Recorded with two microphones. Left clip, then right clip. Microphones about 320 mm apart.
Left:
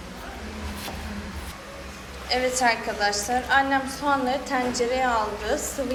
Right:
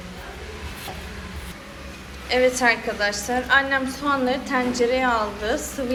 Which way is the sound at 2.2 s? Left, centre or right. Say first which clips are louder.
Right 4 dB; centre.